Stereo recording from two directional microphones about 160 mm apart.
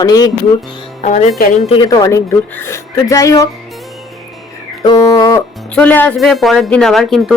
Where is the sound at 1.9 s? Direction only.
20° left (ahead or behind).